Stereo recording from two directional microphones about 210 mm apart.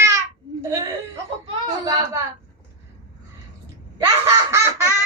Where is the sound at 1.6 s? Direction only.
15° right (ahead or behind).